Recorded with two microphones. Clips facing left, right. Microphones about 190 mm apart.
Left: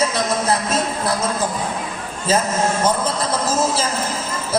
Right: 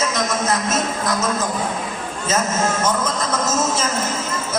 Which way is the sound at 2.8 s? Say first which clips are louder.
Left 1 dB; 30° left (ahead or behind).